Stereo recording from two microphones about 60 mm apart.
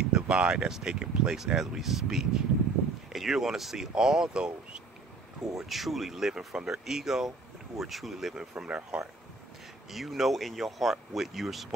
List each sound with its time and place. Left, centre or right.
0.1 s speech: centre
5.6 s speech: centre
9.8 s speech: centre